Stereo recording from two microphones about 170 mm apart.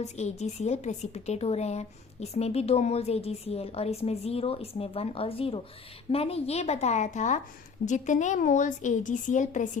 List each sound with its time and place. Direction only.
0.0 s a woman's voice: 40° left (ahead or behind)